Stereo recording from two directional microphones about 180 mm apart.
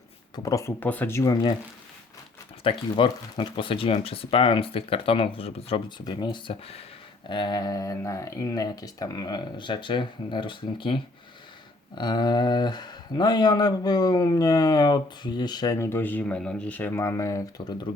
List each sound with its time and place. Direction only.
0.3 s speech: 20° left (ahead or behind)
2.6 s speech: 30° left (ahead or behind)